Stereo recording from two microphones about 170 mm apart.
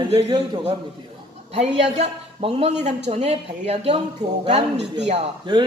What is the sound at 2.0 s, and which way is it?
A man's voice, 35° right (ahead or behind).